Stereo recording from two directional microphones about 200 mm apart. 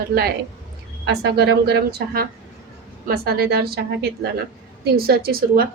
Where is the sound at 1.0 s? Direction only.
55° right (ahead or behind).